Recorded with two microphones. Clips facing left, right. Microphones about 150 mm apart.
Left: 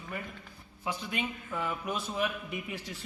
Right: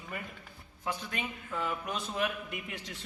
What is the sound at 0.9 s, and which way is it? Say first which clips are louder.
A man's voice: left 2 dB; 10° left (ahead or behind).